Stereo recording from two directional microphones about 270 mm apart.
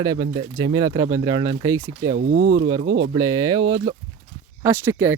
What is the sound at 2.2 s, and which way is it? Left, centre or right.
Speech, right.